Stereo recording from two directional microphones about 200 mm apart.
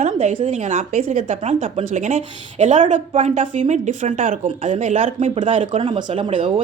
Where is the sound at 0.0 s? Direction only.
35° right (ahead or behind).